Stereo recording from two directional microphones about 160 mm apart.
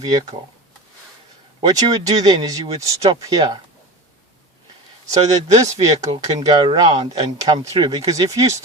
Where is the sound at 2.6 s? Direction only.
40° right (ahead or behind).